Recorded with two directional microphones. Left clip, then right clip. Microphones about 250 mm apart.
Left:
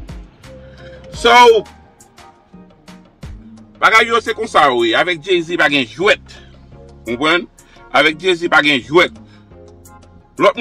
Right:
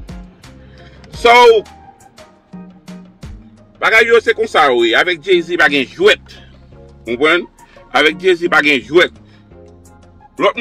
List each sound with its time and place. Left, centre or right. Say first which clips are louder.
0.0 s music: right 1 dB; centre
1.2 s speech: right 1 dB; centre
1.5 s music: right 1 dB; centre
3.8 s a man's voice: right 2 dB; centre